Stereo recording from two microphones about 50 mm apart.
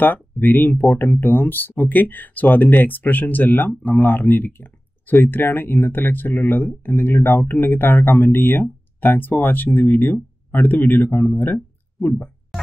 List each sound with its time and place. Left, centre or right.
0.0 s speech: left